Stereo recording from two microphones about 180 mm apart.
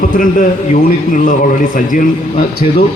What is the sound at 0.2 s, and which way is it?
A man's voice, 50° left (ahead or behind).